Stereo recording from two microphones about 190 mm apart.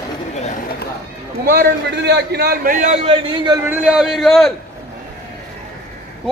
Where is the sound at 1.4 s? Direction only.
55° right (ahead or behind); by 3.1 s 35° right (ahead or behind).